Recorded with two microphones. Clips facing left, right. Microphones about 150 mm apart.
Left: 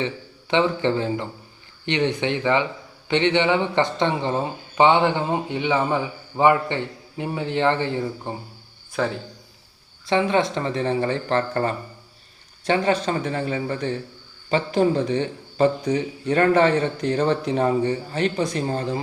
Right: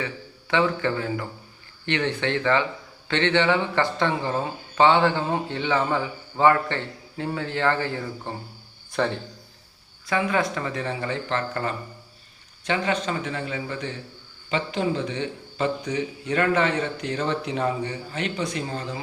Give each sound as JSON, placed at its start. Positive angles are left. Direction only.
{"t": 0.0, "sound": "a man's voice", "side_deg": 20}
{"t": 8.9, "sound": "a man's voice", "side_deg": 0}
{"t": 10.1, "sound": "a man's voice", "side_deg": 25}